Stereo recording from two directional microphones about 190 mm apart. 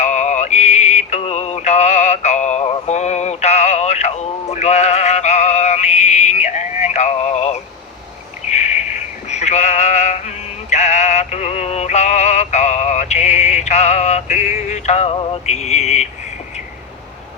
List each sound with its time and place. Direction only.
0.0 s synthetic singing: 35° left (ahead or behind)
8.4 s a sound: 35° left (ahead or behind)
9.3 s synthetic singing: 35° left (ahead or behind)